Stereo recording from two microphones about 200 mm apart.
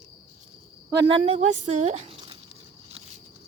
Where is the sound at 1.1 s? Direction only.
30° right (ahead or behind).